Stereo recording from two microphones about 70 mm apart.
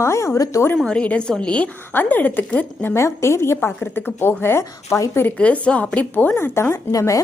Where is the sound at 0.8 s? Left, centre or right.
Centre.